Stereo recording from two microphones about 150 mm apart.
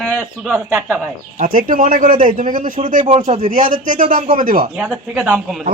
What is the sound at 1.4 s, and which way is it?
Speech, 65° right (ahead or behind).